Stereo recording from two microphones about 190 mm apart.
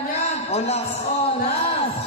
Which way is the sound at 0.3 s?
35° left (ahead or behind).